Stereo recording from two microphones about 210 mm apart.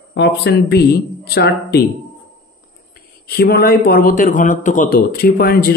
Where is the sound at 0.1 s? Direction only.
55° left (ahead or behind).